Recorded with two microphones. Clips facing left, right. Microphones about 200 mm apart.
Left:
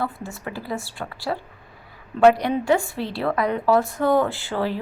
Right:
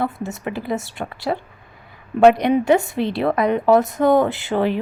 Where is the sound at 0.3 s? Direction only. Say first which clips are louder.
Right 5 dB; 20° right (ahead or behind).